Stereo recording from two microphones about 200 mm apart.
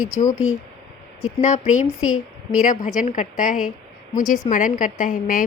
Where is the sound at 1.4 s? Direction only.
35° left (ahead or behind).